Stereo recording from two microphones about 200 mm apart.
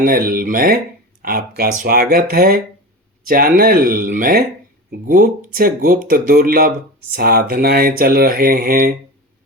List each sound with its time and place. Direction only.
0.0 s speech: 45° right (ahead or behind)